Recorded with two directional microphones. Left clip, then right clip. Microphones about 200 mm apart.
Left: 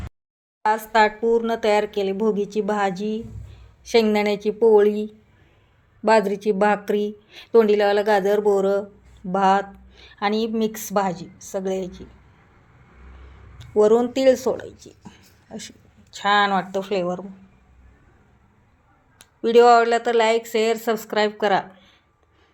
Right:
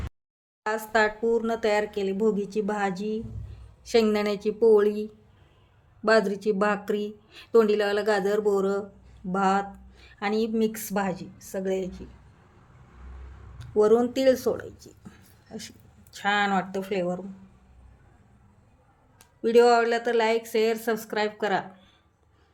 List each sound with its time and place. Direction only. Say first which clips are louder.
0.6 s speech: left 6 dB; 15° left (ahead or behind)
6.1 s speech: left 4 dB; 10° left (ahead or behind)
13.6 s speech: left 4 dB; 10° left (ahead or behind)
19.2 s speech: left 5 dB; 15° left (ahead or behind)